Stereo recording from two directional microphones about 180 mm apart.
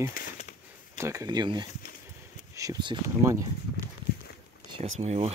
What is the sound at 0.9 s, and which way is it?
Speech, 15° right (ahead or behind).